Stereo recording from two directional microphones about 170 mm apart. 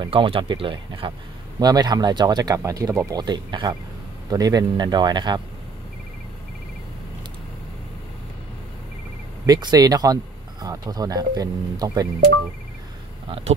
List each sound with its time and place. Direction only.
0.0 s speech: 30° right (ahead or behind)
9.5 s speech: 25° right (ahead or behind)
13.3 s speech: 40° right (ahead or behind)